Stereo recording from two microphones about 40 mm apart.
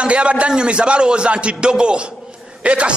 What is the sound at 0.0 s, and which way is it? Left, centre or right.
A man's voice, right.